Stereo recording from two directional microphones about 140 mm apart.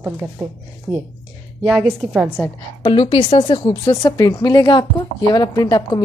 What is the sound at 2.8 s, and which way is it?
Speech, 35° left (ahead or behind).